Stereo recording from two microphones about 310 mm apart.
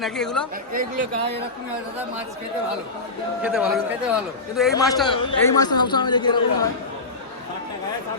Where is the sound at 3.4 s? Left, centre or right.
Centre.